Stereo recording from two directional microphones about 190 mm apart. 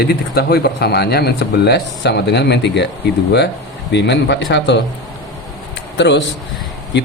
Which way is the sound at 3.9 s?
65° left (ahead or behind).